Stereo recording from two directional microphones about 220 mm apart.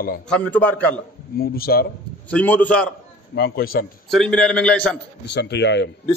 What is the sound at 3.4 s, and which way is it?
Speech, 45° left (ahead or behind).